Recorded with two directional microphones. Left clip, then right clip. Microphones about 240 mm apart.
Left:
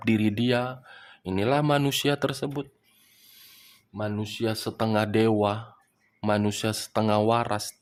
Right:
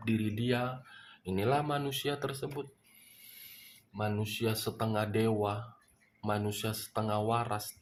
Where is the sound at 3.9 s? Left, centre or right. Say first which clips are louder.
Left 4 dB; left.